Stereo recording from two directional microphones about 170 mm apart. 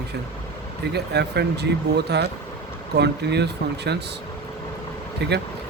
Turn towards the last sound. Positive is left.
turn(degrees=-80)